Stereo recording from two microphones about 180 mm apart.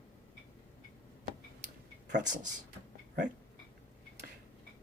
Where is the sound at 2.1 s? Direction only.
45° right (ahead or behind).